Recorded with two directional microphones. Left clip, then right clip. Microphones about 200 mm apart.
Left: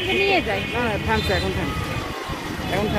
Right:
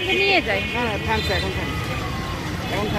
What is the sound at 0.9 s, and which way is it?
Speech, 25° left (ahead or behind).